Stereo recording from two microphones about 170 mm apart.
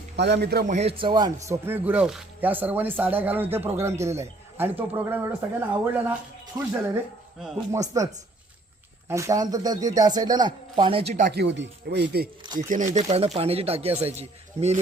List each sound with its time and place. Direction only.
0.2 s speech: 80° right
0.7 s speech: 40° right (ahead or behind)
1.6 s speech: 10° right (ahead or behind)
7.7 s speech: 20° right (ahead or behind); by 11.2 s 35° right (ahead or behind)
11.3 s speech: 85° right
12.5 s speech: 50° right (ahead or behind)